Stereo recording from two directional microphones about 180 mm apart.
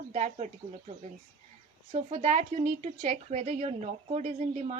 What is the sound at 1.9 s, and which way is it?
A woman's voice, 40° right (ahead or behind).